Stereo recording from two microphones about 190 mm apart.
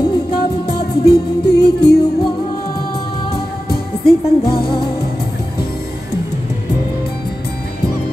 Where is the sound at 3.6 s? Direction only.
55° left (ahead or behind).